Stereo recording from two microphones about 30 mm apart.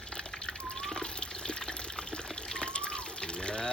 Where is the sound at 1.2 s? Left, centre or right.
Left.